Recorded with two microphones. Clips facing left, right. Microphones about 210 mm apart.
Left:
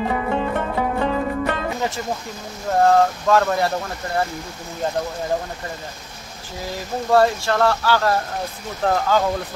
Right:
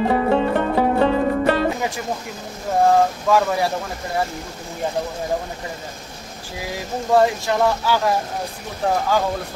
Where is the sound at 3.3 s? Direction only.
10° right (ahead or behind).